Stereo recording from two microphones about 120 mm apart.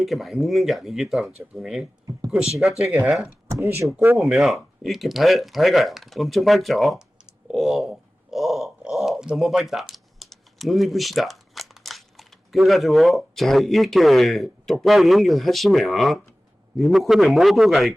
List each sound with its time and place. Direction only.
0.0 s speech: centre (ahead or behind)
3.5 s speech: 25° right (ahead or behind)
4.2 s speech: centre (ahead or behind)